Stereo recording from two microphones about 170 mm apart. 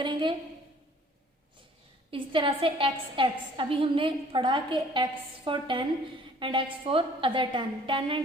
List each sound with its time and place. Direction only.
0.0 s a woman's voice: 30° right (ahead or behind)
2.0 s a woman's voice: 30° right (ahead or behind)